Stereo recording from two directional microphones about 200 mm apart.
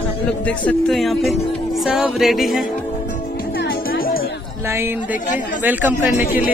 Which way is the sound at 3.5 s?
50° left (ahead or behind).